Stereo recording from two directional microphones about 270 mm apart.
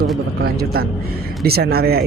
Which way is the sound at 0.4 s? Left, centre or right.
Right.